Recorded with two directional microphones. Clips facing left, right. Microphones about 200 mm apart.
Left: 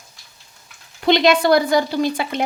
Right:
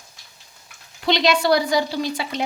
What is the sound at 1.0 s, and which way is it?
Speech, 50° left (ahead or behind).